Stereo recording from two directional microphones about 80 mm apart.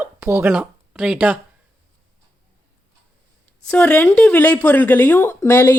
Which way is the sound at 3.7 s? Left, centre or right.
Left.